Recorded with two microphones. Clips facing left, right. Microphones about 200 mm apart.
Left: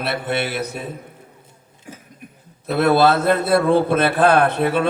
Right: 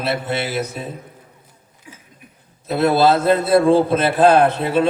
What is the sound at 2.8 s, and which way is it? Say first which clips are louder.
Speech: even; 60° left (ahead or behind).